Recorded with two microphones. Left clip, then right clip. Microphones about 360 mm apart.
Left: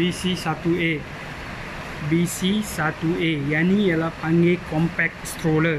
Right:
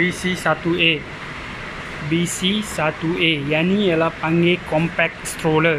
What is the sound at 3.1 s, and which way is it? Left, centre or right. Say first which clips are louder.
Speech: right 5 dB; right.